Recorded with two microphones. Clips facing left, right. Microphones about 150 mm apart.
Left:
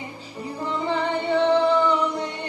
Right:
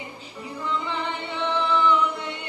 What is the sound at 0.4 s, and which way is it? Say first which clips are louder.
Music: left 2 dB; 40° left (ahead or behind).